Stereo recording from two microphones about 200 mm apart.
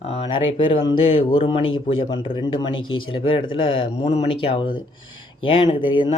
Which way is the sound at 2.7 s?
85° left.